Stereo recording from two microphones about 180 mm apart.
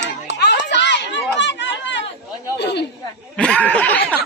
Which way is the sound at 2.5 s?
70° left (ahead or behind).